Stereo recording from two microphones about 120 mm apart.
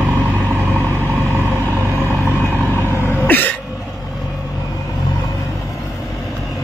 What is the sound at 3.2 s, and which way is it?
Cough, 15° left (ahead or behind).